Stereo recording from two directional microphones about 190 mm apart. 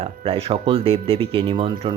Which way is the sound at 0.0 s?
30° right (ahead or behind).